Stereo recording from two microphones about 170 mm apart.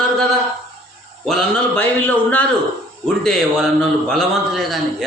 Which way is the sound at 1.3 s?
5° left (ahead or behind).